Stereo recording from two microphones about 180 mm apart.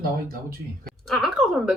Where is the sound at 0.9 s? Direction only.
Centre (ahead or behind).